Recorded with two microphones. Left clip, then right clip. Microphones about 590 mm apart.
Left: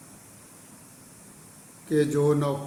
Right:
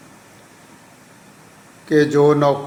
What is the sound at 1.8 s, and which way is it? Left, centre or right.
Speech, left.